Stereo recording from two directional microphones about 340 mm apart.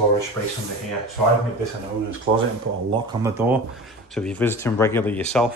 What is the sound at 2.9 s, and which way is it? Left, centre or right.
Speech, centre.